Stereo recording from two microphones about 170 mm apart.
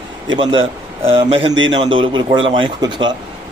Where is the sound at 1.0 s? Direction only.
35° right (ahead or behind).